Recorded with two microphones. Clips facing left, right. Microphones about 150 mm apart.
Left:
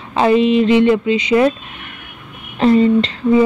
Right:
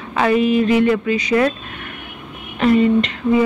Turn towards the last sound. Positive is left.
turn(degrees=30)  # may be behind; listen again after turning